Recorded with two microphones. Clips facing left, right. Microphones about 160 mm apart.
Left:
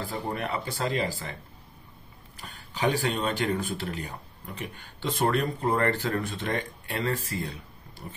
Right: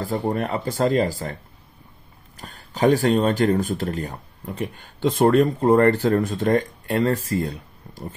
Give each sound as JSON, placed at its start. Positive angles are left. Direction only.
{"t": 0.0, "sound": "speech", "side_deg": -40}
{"t": 2.3, "sound": "speech", "side_deg": -45}